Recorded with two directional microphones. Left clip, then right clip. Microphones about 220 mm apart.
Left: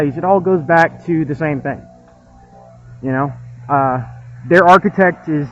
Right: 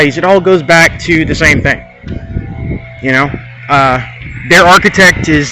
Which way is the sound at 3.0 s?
25° right (ahead or behind).